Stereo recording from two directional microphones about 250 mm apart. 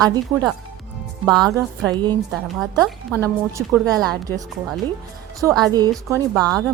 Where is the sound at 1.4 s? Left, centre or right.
Centre.